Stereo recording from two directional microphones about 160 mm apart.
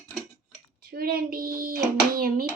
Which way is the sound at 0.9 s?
70° right (ahead or behind).